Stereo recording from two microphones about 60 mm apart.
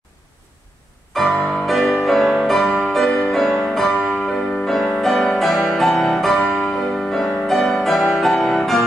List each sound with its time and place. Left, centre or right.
1.3 s music: centre
1.7 s music: centre